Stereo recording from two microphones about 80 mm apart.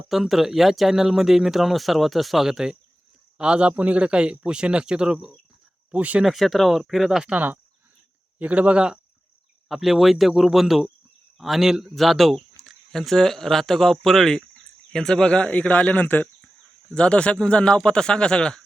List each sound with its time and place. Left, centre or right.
0.1 s a man's voice: centre
6.2 s speech: centre
7.3 s a man's voice: right; by 18.6 s centre